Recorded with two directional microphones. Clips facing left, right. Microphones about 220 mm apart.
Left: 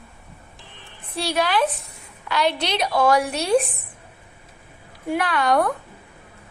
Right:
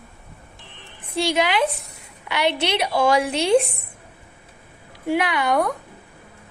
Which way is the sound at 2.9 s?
25° right (ahead or behind).